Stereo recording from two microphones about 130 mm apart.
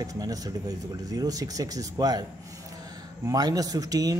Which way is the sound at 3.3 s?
30° right (ahead or behind).